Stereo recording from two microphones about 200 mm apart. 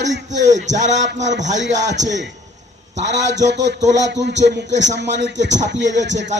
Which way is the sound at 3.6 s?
60° right (ahead or behind).